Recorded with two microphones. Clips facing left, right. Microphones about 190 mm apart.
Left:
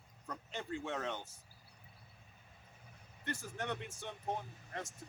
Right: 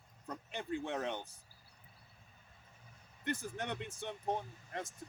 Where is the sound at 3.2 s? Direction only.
15° right (ahead or behind).